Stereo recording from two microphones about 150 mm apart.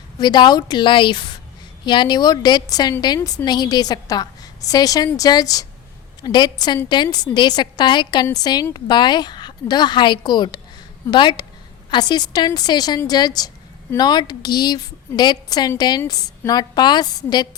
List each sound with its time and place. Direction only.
0.2 s a woman's voice: 30° left (ahead or behind)